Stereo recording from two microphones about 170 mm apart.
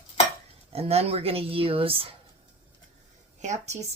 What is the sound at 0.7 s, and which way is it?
Speech, 35° right (ahead or behind).